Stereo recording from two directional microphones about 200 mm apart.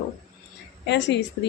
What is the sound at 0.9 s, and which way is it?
Speech, 60° left (ahead or behind).